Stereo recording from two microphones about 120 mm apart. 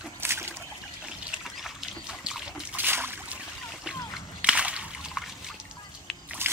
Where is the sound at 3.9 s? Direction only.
5° right (ahead or behind).